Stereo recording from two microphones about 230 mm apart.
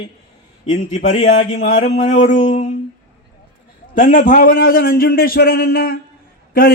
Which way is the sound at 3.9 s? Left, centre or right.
Left.